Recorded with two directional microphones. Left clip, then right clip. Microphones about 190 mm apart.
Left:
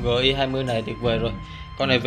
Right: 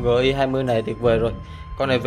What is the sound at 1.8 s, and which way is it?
Speech, 5° right (ahead or behind).